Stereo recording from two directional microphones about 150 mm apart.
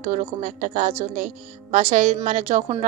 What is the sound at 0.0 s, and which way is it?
A woman's voice, 60° right (ahead or behind).